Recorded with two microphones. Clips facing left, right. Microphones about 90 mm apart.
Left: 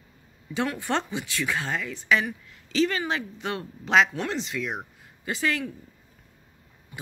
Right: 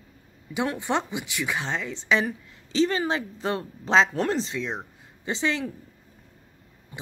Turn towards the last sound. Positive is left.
turn(degrees=-25)  # may be behind; listen again after turning